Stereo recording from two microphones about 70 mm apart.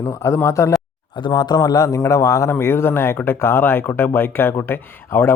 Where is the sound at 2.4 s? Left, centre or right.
Left.